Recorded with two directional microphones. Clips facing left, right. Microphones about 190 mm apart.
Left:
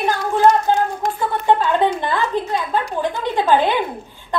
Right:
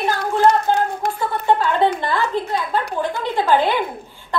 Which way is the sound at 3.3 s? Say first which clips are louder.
Left 1 dB; 15° left (ahead or behind).